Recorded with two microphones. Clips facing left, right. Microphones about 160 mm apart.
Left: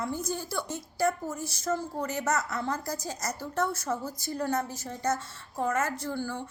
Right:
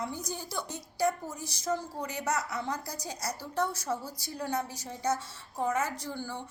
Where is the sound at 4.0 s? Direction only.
50° left (ahead or behind).